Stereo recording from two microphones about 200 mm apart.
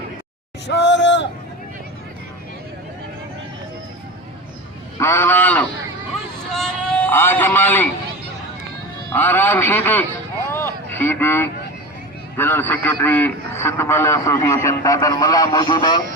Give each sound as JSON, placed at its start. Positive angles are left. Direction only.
{"t": 0.7, "sound": "speech", "side_deg": 60}
{"t": 4.9, "sound": "a man's voice", "side_deg": 15}
{"t": 9.0, "sound": "a man's voice", "side_deg": 10}
{"t": 10.5, "sound": "a sound", "side_deg": 10}
{"t": 12.4, "sound": "a man's voice", "side_deg": 10}